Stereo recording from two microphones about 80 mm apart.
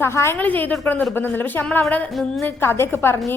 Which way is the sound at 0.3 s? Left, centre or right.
Left.